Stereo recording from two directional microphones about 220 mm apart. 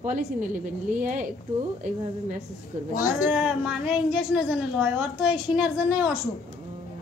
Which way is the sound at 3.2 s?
5° right (ahead or behind).